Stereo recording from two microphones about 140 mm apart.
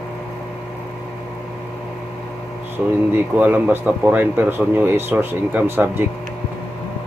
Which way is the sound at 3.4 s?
10° right (ahead or behind).